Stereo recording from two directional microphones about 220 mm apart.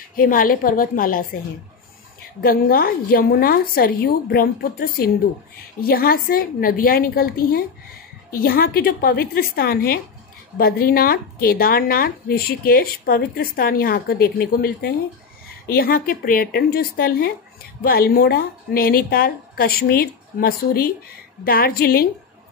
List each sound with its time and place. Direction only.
0.1 s speech: 40° left (ahead or behind)
2.4 s speech: 40° left (ahead or behind)